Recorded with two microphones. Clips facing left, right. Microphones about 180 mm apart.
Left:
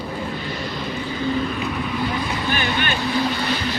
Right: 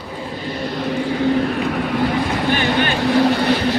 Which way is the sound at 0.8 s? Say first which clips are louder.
Right 9 dB; 70° right (ahead or behind).